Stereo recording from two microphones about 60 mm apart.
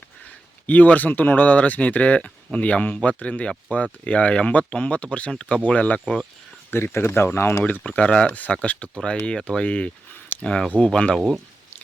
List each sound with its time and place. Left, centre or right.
0.7 s speech: left
6.7 s speech: left
7.7 s speech: centre